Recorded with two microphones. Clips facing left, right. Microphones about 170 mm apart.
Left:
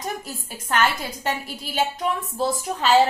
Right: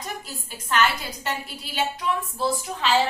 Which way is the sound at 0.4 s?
45° left (ahead or behind).